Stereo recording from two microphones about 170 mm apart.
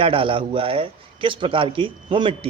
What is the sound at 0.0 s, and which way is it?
A man's voice, 30° right (ahead or behind).